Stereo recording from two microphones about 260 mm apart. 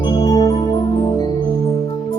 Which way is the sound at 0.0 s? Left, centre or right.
Centre.